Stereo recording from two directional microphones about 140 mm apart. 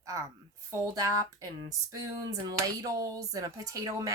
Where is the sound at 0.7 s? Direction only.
25° right (ahead or behind).